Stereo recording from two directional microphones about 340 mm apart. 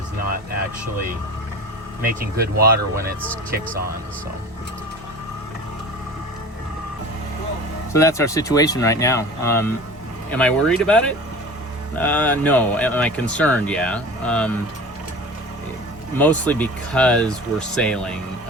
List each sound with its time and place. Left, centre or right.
2.0 s speech: right
7.9 s speech: centre
16.1 s speech: centre